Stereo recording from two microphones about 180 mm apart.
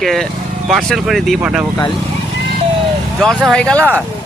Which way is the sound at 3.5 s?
5° left (ahead or behind).